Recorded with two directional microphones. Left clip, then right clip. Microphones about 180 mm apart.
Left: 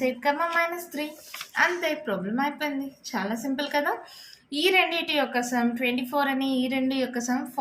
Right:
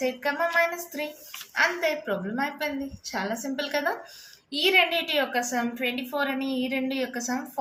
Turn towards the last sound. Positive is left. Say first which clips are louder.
# left 2 dB
turn(degrees=20)  # may be behind; listen again after turning